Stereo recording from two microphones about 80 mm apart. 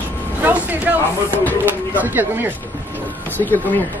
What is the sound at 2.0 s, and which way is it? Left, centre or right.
Speech, right.